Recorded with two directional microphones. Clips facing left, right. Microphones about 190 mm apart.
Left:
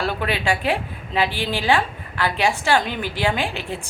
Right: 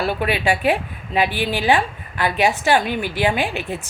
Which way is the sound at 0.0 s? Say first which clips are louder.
Right 3 dB; 15° right (ahead or behind).